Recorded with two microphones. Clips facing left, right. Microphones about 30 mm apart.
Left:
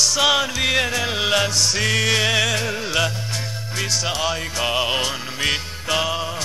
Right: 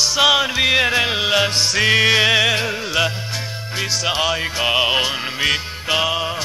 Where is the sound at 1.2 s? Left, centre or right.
Centre.